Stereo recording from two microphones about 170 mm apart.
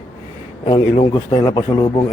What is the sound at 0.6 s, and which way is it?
A man's voice, 30° left (ahead or behind).